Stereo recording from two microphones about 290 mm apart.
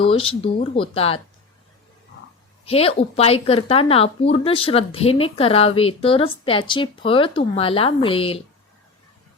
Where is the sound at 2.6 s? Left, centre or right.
Centre.